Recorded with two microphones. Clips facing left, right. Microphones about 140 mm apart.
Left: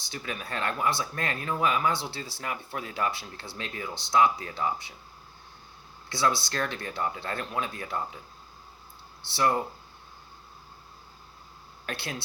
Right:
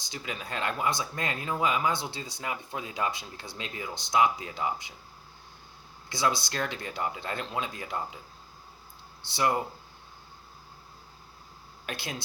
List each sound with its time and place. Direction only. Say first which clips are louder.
0.0 s speech: left 1 dB; 15° right (ahead or behind)
6.1 s speech: left 1 dB; 15° right (ahead or behind)
9.2 s speech: left 1 dB; 15° right (ahead or behind)
11.9 s speech: left 1 dB; 15° right (ahead or behind)